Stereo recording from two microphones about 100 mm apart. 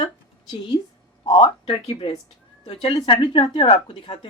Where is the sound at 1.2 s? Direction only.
60° left (ahead or behind).